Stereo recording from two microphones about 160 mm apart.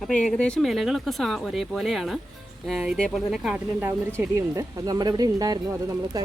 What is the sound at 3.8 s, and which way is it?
Speech, 15° right (ahead or behind).